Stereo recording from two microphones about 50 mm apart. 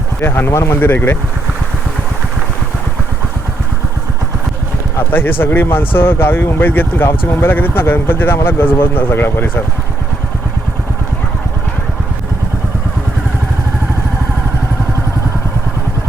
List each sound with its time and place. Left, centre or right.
0.2 s speech: left
5.1 s speech: left